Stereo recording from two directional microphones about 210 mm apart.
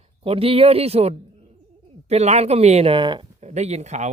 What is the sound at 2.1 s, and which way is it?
A man's voice, 30° right (ahead or behind).